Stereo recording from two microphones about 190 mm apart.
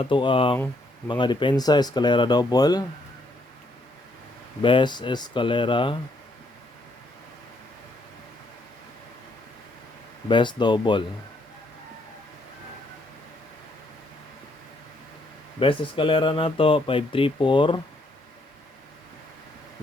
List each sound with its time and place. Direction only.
0.0 s speech: 25° left (ahead or behind)
4.6 s speech: 25° left (ahead or behind)
10.2 s speech: 25° left (ahead or behind)
15.6 s speech: 25° left (ahead or behind)